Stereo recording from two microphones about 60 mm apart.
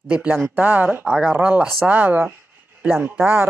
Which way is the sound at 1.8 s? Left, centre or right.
Right.